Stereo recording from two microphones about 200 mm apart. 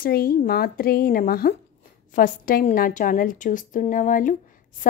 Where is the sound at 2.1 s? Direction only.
45° left (ahead or behind).